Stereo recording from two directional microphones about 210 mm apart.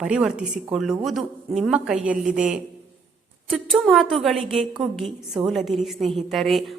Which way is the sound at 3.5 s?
Centre (ahead or behind).